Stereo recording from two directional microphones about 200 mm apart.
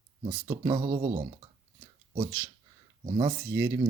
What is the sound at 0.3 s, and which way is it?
Speech, 20° right (ahead or behind).